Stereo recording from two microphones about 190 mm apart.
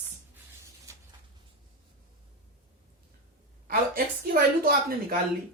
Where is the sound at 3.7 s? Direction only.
50° right (ahead or behind).